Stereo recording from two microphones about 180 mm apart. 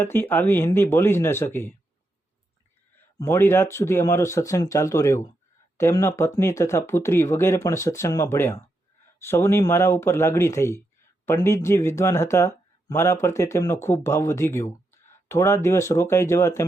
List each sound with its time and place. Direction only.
0.0 s speech: 10° left (ahead or behind)
3.2 s speech: 15° left (ahead or behind)